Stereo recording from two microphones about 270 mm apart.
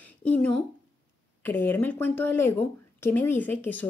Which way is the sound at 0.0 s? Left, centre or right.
Centre.